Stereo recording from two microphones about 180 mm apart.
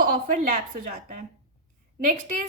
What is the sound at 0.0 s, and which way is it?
A woman's voice, 50° right (ahead or behind).